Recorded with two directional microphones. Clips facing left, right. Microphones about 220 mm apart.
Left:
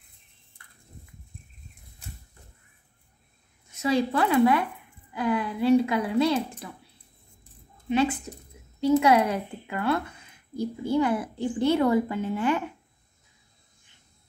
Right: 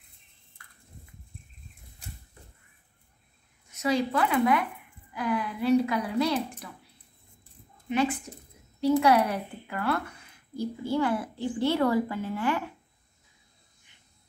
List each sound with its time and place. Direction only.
3.7 s a woman's voice: 30° left (ahead or behind)
8.8 s a woman's voice: 20° left (ahead or behind)